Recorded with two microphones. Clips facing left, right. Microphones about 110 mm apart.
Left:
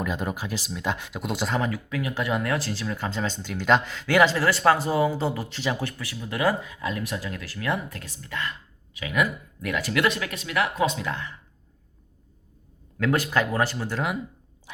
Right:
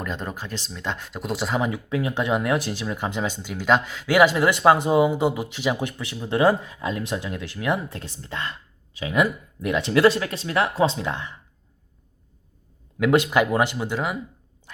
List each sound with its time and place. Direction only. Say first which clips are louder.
0.0 s speech: left 2 dB; 5° left (ahead or behind)
1.6 s speech: right 3 dB; 25° right (ahead or behind)
13.0 s speech: right 5 dB; 20° right (ahead or behind)